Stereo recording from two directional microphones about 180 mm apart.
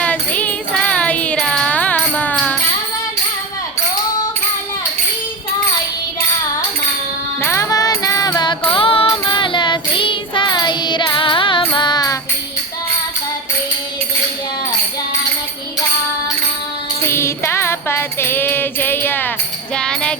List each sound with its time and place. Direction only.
0.0 s music: 10° left (ahead or behind)
7.4 s music: 15° left (ahead or behind)
17.1 s music: 15° left (ahead or behind)